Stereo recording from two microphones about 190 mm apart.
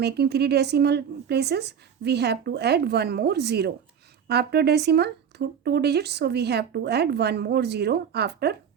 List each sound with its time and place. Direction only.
0.0 s speech: 60° right (ahead or behind)